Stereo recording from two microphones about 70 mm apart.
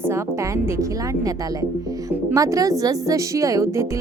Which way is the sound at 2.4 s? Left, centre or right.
Right.